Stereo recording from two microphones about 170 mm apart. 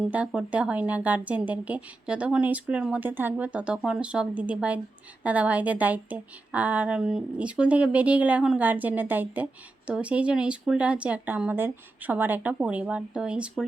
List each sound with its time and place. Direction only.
0.0 s a woman's voice: 5° right (ahead or behind)